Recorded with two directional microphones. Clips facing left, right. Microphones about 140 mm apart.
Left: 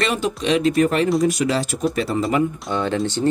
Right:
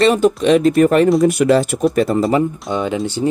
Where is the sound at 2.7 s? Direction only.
15° right (ahead or behind).